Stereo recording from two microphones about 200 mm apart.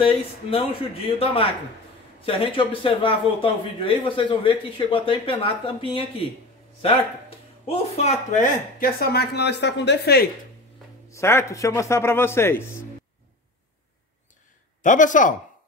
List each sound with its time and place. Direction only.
0.0 s speech: 25° left (ahead or behind); by 10.2 s 55° left (ahead or behind)
11.1 s a man's voice: 15° left (ahead or behind)
14.8 s speech: 40° left (ahead or behind)